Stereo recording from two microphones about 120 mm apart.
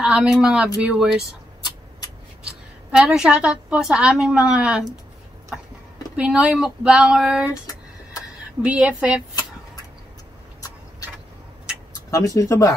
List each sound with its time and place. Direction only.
0.1 s a woman's voice: 5° right (ahead or behind)
2.9 s a woman's voice: 5° right (ahead or behind)
6.1 s speech: 5° right (ahead or behind)
8.6 s a woman's voice: 10° right (ahead or behind)
12.4 s speech: 30° left (ahead or behind)